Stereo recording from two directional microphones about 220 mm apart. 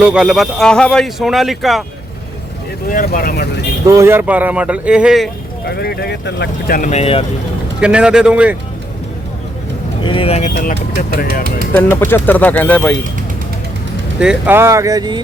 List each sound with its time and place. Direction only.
0.0 s speech: 5° right (ahead or behind)
2.9 s speech: 40° left (ahead or behind)
3.8 s speech: 10° right (ahead or behind)
5.6 s speech: 45° left (ahead or behind); by 7.3 s 25° left (ahead or behind)
7.8 s speech: 5° right (ahead or behind)
10.0 s speech: 25° left (ahead or behind); by 11.4 s 40° left (ahead or behind)
11.7 s speech: 10° left (ahead or behind)
14.2 s speech: 5° right (ahead or behind)